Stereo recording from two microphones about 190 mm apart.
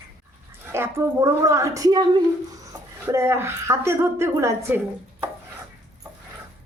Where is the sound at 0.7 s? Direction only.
10° right (ahead or behind).